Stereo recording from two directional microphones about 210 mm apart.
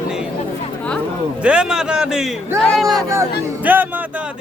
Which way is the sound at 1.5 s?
5° right (ahead or behind).